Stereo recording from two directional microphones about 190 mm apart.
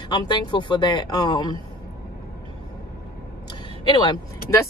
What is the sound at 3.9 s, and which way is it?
Speech, 25° left (ahead or behind).